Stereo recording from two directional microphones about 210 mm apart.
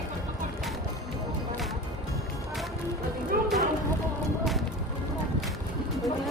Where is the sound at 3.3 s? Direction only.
45° right (ahead or behind).